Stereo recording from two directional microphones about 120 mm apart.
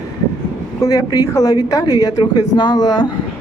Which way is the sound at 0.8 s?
30° left (ahead or behind).